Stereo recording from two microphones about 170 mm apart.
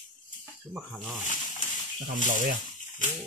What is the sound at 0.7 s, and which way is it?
Speech, 5° right (ahead or behind).